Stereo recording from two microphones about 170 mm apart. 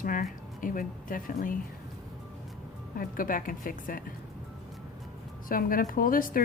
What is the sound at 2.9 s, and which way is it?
Speech, 55° left (ahead or behind).